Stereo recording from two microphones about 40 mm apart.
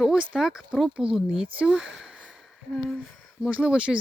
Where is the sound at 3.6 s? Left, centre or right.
Right.